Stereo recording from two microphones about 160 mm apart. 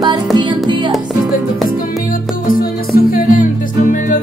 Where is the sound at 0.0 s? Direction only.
25° right (ahead or behind).